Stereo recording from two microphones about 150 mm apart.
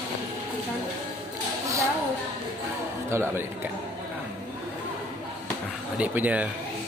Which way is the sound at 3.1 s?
15° right (ahead or behind).